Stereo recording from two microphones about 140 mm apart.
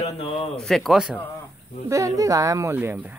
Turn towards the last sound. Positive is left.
turn(degrees=-10)  # may be behind; listen again after turning